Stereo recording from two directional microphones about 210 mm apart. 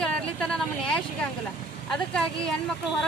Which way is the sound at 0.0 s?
5° left (ahead or behind).